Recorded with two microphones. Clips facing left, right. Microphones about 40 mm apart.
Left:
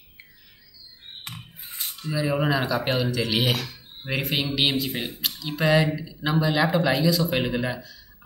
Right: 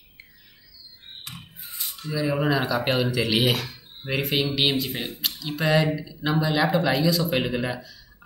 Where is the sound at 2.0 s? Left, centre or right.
Centre.